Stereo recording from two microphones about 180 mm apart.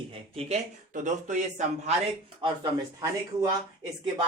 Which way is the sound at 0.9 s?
40° right (ahead or behind).